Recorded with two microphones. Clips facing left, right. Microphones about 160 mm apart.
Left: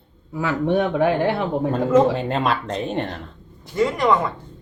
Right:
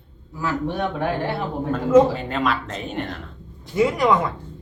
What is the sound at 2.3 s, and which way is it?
Speech, 35° left (ahead or behind).